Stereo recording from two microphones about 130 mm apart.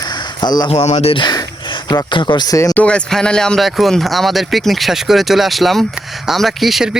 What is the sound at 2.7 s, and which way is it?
Speech, 10° left (ahead or behind).